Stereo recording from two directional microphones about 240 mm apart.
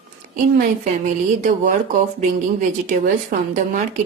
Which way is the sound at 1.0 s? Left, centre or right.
Right.